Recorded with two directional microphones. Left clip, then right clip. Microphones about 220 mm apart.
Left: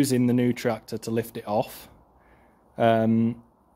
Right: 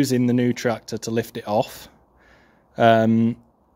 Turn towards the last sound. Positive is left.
turn(degrees=-15)  # may be behind; listen again after turning